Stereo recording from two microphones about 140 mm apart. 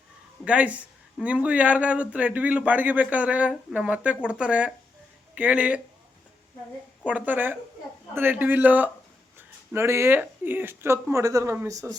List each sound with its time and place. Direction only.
0.4 s a man's voice: 10° right (ahead or behind)
7.0 s a man's voice: 10° right (ahead or behind)